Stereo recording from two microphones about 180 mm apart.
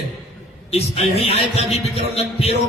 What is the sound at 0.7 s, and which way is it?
A man's voice, 35° left (ahead or behind).